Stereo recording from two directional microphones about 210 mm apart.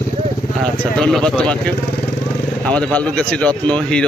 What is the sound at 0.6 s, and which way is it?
Speech, 5° left (ahead or behind).